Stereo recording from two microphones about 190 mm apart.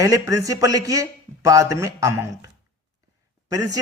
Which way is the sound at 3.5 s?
20° right (ahead or behind).